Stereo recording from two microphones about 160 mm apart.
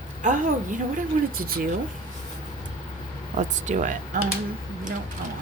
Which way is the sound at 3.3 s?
50° right (ahead or behind).